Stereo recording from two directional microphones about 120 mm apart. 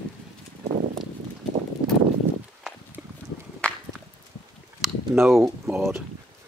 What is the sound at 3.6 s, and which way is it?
Walk, 10° left (ahead or behind).